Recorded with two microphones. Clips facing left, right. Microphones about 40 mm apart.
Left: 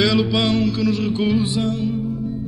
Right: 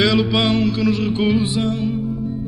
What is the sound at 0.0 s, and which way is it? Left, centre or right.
Music, centre.